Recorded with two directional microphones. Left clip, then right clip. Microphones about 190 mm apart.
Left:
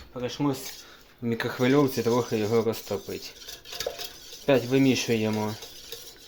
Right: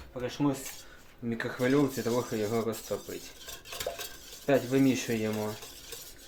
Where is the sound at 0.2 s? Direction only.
45° left (ahead or behind).